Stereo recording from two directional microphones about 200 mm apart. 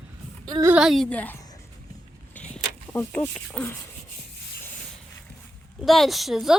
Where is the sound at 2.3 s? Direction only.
5° left (ahead or behind).